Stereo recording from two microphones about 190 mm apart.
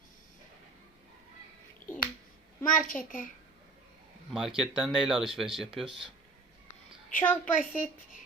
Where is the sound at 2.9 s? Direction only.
45° left (ahead or behind).